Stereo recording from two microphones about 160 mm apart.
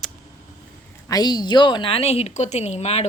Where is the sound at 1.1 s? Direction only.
25° left (ahead or behind).